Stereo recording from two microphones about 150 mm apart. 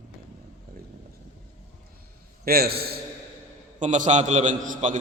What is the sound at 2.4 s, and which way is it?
Speech, 90° right.